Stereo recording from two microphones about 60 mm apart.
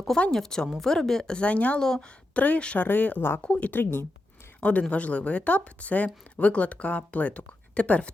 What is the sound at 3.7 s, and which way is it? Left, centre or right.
Speech, left.